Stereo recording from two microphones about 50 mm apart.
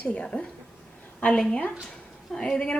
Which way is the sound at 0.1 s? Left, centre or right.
Centre.